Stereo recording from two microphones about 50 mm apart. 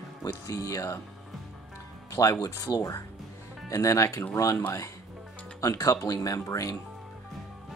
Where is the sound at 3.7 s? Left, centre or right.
Left.